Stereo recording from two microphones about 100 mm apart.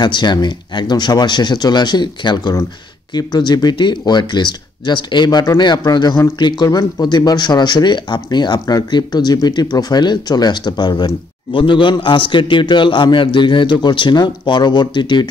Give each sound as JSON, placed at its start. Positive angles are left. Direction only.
{"t": 0.0, "sound": "speech", "side_deg": 50}